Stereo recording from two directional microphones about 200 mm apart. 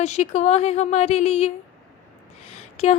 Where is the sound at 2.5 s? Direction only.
30° left (ahead or behind).